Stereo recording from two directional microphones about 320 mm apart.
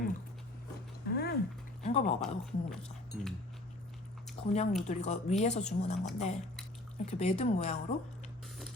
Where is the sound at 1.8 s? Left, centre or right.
Centre.